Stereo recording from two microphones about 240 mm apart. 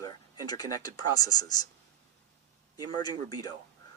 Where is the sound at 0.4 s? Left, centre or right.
Centre.